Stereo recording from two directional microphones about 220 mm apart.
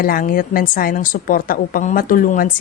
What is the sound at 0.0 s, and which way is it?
A woman's voice, 40° left (ahead or behind).